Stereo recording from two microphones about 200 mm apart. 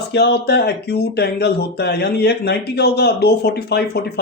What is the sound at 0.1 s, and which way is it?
Speech, 55° left (ahead or behind).